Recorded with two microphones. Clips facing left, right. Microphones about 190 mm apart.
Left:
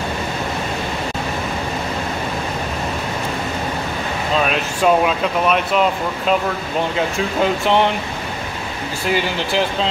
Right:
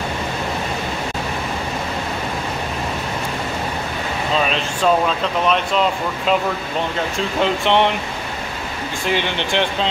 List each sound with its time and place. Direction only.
4.4 s speech: 5° left (ahead or behind)
7.2 s speech: centre (ahead or behind)
9.0 s speech: 5° left (ahead or behind)